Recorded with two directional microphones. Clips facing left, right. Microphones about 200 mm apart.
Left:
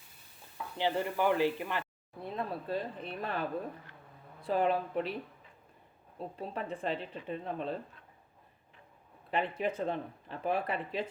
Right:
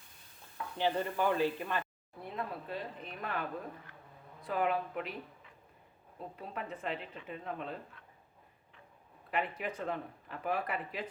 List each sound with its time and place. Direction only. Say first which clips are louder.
0.8 s speech: left 1 dB; 15° left (ahead or behind)
2.3 s speech: left 4 dB; 35° left (ahead or behind)
4.4 s speech: left 3 dB; 30° left (ahead or behind)
6.1 s speech: left 4 dB; 30° left (ahead or behind)
9.3 s speech: left 4 dB; 25° left (ahead or behind)